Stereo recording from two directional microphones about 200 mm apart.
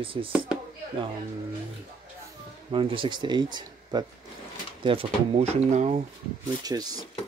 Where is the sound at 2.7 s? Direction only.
25° right (ahead or behind).